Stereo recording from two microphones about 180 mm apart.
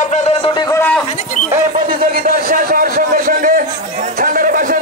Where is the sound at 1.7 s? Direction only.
55° right (ahead or behind).